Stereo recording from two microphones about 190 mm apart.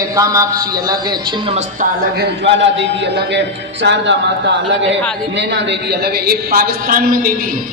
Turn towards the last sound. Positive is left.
turn(degrees=-50)  # may be behind; listen again after turning